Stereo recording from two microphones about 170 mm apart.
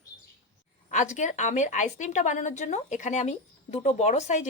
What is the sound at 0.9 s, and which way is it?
Speech, 45° left (ahead or behind).